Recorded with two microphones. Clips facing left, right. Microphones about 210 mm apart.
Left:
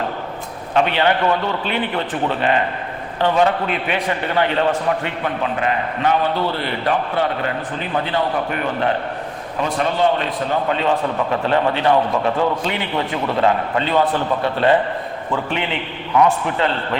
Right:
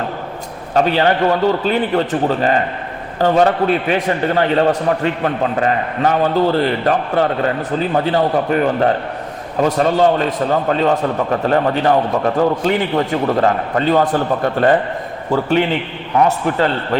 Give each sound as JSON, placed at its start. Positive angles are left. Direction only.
{"t": 0.7, "sound": "a man's voice", "side_deg": -40}